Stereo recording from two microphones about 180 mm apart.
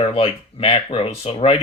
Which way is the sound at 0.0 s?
30° left (ahead or behind).